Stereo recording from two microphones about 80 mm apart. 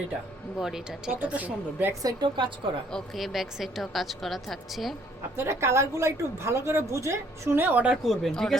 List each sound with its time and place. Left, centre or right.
0.6 s speech: centre
1.2 s a woman's voice: centre
1.9 s a woman's voice: right
2.2 s a woman's voice: right
3.2 s a woman's voice: centre
5.4 s a woman's voice: right
8.0 s a woman's voice: centre